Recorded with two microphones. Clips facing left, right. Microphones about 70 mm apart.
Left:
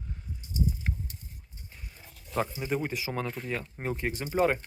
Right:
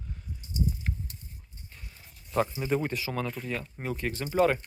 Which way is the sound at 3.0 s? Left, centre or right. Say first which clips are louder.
Even; left.